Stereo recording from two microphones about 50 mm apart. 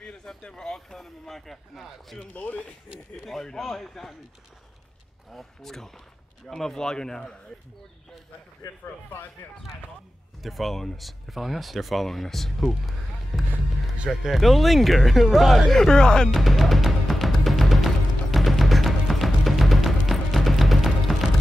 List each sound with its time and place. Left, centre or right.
0.0 s speech: centre
2.3 s speech: left
3.3 s speech: centre
5.3 s speech: centre
9.4 s speech: left
10.4 s speech: centre
16.3 s music: centre